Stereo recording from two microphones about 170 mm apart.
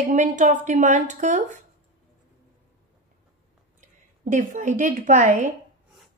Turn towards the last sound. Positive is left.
turn(degrees=-45)  # may be behind; listen again after turning